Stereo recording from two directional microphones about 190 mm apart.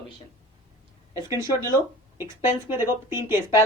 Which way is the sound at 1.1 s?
15° right (ahead or behind).